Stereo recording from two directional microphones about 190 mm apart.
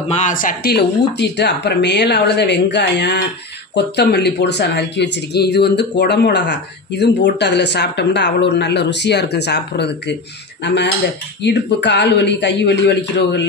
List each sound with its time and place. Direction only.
0.1 s speech: 40° left (ahead or behind); by 13.5 s 65° left (ahead or behind)